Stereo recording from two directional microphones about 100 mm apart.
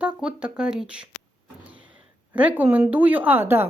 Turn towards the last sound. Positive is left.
turn(degrees=-20)  # may be behind; listen again after turning